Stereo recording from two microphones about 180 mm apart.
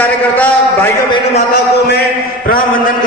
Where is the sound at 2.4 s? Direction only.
50° left (ahead or behind).